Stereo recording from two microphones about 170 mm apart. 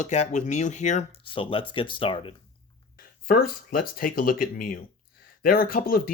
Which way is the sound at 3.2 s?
60° left (ahead or behind).